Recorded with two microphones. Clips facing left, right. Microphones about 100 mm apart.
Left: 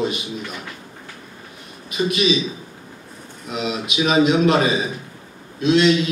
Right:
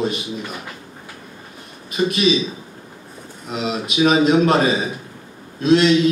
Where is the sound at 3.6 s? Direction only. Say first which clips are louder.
Right 3 dB; 40° right (ahead or behind).